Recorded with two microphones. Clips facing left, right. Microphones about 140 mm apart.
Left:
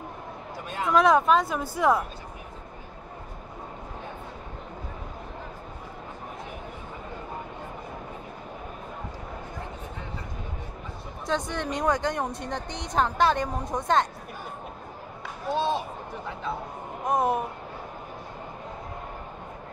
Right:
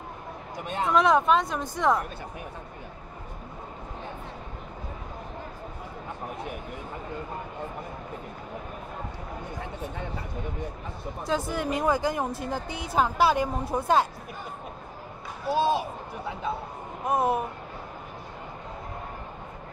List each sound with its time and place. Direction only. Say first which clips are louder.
0.7 s speech: right 1 dB; 25° right (ahead or behind)
0.9 s speech: left 2 dB; centre (ahead or behind)
11.2 s speech: right 1 dB; 5° right (ahead or behind)
15.5 s speech: right 2 dB; 5° right (ahead or behind)
17.0 s speech: even; 5° right (ahead or behind)